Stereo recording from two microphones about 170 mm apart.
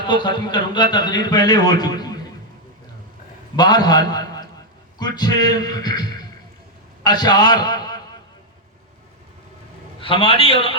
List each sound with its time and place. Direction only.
0.1 s a man's voice: 25° left (ahead or behind)
3.5 s a man's voice: 25° left (ahead or behind)
10.0 s a man's voice: 30° left (ahead or behind)